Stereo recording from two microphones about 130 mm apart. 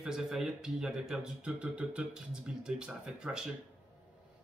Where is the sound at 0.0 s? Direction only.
5° right (ahead or behind).